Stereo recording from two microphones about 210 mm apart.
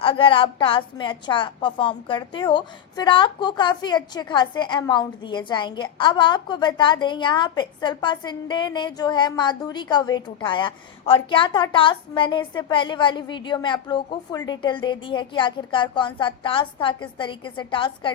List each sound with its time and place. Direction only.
0.0 s a woman's voice: 25° left (ahead or behind)